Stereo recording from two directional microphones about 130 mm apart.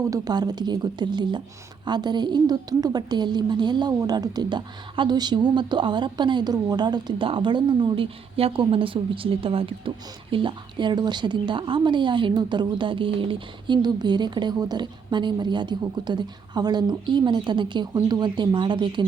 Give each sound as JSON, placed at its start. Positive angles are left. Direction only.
{"t": 0.1, "sound": "a woman's voice", "side_deg": -30}